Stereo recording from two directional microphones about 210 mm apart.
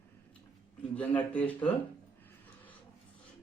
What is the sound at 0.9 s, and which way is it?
Speech, 5° left (ahead or behind).